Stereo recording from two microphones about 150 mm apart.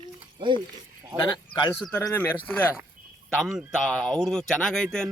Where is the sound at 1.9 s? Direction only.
20° left (ahead or behind).